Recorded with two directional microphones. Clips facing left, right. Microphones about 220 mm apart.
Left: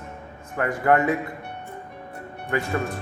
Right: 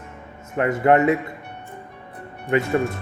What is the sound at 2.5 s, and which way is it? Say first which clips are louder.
Speech: right 6 dB; 20° right (ahead or behind).